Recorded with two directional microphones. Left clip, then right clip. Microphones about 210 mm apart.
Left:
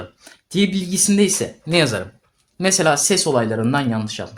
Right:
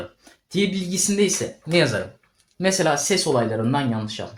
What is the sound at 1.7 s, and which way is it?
Speech, 30° left (ahead or behind).